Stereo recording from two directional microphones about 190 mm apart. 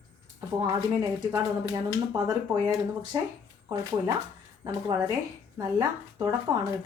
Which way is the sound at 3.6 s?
20° right (ahead or behind).